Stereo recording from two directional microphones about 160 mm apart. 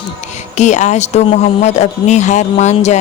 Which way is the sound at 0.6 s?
45° left (ahead or behind).